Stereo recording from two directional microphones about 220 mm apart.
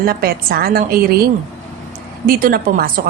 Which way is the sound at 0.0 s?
40° right (ahead or behind).